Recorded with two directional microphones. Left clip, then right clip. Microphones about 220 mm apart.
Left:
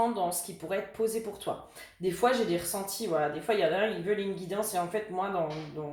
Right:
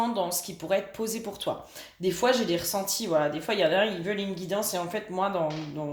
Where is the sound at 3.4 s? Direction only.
45° right (ahead or behind).